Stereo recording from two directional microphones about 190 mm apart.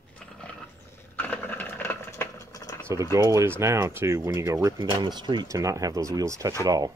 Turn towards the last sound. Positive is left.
turn(degrees=-20)  # may be behind; listen again after turning